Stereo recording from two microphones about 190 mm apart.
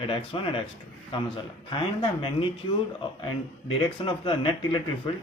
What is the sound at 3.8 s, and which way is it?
Speech, 25° left (ahead or behind).